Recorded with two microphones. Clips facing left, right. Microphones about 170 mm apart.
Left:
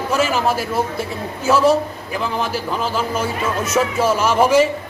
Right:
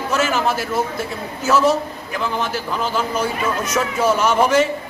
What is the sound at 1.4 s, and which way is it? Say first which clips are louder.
Speech: left 2 dB; 30° left (ahead or behind).